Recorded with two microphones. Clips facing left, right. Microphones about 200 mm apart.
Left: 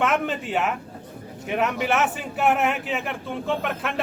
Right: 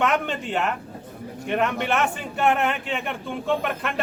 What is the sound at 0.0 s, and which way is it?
Speech, centre (ahead or behind).